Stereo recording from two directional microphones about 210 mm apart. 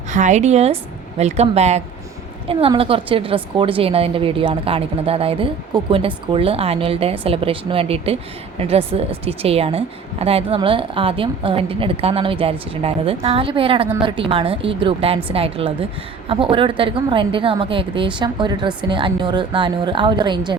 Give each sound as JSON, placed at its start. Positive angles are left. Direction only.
{"t": 0.1, "sound": "speech", "side_deg": -35}